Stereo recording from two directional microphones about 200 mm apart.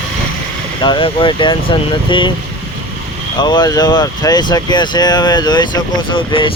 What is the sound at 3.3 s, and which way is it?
Speech, 20° left (ahead or behind).